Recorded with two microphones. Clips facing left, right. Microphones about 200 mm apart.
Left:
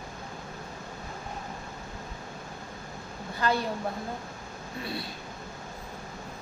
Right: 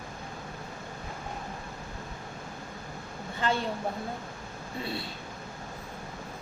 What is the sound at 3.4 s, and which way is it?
Speech, 25° right (ahead or behind).